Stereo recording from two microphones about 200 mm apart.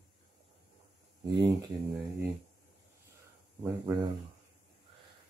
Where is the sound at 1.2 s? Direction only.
20° right (ahead or behind).